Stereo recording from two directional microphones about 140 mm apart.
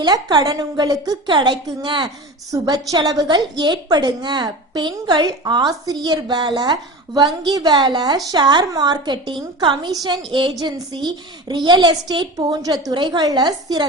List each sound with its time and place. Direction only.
0.0 s a woman's voice: 30° right (ahead or behind)